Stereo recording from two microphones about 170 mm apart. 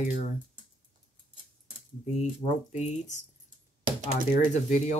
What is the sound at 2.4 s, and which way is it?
Speech, 45° left (ahead or behind).